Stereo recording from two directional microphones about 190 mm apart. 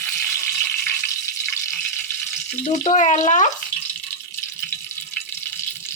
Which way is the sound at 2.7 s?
40° left (ahead or behind).